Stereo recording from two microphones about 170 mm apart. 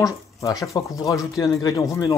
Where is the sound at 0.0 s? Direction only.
20° left (ahead or behind).